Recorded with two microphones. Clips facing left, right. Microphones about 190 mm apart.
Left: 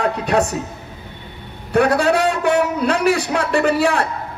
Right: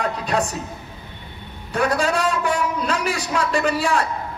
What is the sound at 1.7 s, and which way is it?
A man's voice, 65° left (ahead or behind).